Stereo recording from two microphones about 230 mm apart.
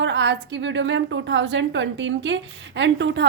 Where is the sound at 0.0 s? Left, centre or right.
Right.